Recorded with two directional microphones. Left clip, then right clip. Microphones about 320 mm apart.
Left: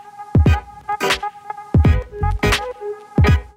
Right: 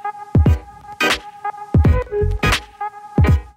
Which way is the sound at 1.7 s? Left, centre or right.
Centre.